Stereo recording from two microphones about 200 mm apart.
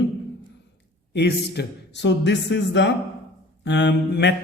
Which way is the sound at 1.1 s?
60° left (ahead or behind).